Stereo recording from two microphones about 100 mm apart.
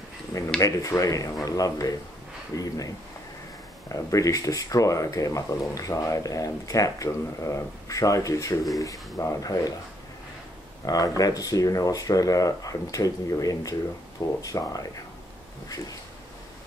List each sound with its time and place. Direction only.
0.6 s speech: 35° left (ahead or behind)
3.9 s speech: 35° left (ahead or behind)
10.9 s speech: 35° left (ahead or behind)